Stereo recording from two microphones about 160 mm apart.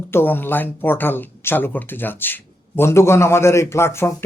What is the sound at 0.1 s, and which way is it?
Speech, 15° left (ahead or behind).